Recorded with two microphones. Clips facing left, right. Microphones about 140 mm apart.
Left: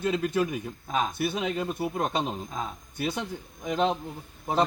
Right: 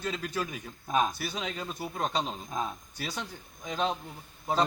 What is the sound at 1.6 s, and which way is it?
A man's voice, 15° left (ahead or behind).